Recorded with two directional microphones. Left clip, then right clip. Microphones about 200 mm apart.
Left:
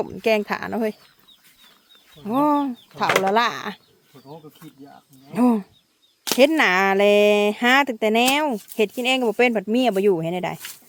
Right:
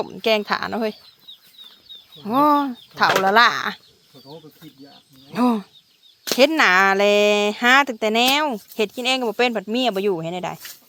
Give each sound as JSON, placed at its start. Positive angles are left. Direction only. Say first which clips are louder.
{"t": 0.1, "sound": "speech", "louder": "right 2 dB", "side_deg": 15}
{"t": 2.2, "sound": "speech", "louder": "right 3 dB", "side_deg": 0}
{"t": 5.3, "sound": "speech", "louder": "even", "side_deg": 20}